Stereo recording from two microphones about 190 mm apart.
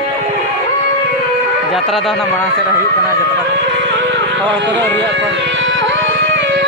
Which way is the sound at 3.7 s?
70° right (ahead or behind).